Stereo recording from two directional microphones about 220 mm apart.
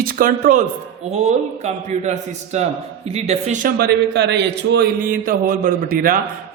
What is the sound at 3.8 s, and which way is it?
A man's voice, 50° right (ahead or behind).